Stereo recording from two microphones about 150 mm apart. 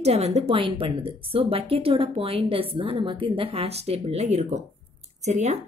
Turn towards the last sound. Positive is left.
turn(degrees=-50)  # may be behind; listen again after turning